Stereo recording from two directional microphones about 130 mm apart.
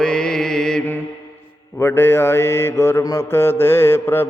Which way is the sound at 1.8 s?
20° left (ahead or behind).